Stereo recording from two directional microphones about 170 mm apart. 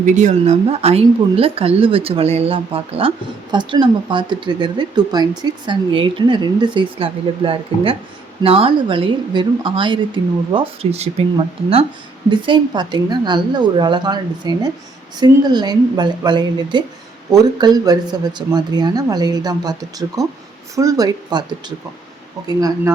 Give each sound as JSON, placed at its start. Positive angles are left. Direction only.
{"t": 0.0, "sound": "speech", "side_deg": -45}
{"t": 22.4, "sound": "speech", "side_deg": -20}